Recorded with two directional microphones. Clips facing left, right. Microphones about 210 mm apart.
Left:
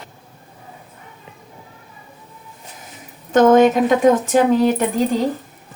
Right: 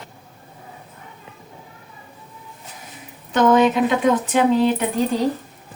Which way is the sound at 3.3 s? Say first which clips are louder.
Left 4 dB; 45° left (ahead or behind).